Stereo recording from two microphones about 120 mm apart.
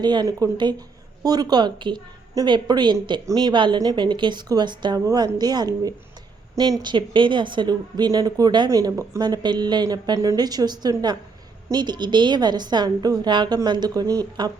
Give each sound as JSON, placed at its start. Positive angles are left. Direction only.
{"t": 0.0, "sound": "speech", "side_deg": -35}